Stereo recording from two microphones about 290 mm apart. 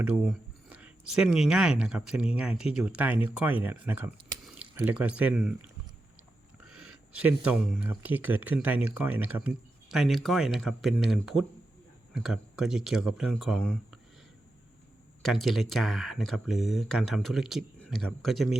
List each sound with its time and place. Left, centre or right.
0.0 s speech: centre
15.2 s speech: centre